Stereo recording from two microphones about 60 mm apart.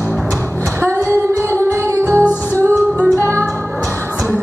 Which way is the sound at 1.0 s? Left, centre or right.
Right.